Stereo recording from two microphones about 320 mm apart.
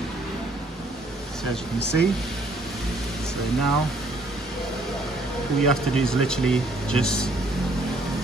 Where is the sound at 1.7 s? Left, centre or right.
Left.